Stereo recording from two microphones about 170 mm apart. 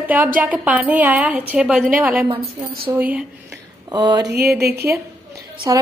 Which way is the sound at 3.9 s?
25° right (ahead or behind).